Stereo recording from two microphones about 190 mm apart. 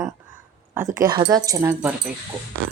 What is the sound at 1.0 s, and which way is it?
Speech, 20° right (ahead or behind).